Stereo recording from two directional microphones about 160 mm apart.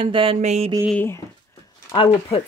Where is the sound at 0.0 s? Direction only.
35° right (ahead or behind).